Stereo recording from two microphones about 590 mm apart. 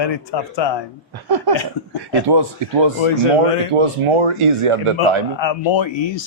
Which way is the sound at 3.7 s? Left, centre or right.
Right.